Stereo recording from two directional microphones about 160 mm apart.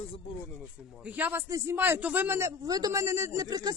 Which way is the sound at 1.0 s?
10° right (ahead or behind).